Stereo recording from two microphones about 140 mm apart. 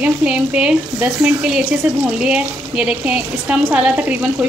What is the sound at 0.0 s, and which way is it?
A woman's voice, 10° right (ahead or behind).